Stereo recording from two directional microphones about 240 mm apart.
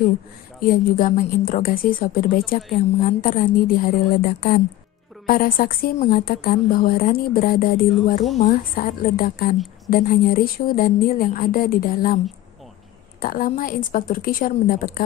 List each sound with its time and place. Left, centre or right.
0.6 s a woman's voice: left
13.2 s a woman's voice: left